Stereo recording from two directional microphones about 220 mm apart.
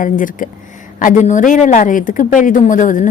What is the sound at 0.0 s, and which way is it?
A woman's voice, 35° left (ahead or behind).